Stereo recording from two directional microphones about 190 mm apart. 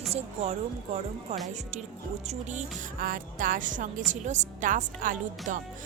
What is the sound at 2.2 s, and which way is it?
Music, 40° right (ahead or behind).